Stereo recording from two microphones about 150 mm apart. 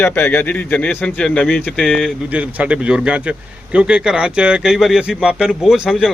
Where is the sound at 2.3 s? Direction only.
10° right (ahead or behind).